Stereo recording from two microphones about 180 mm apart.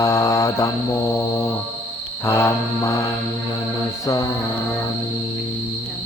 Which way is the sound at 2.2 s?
15° left (ahead or behind).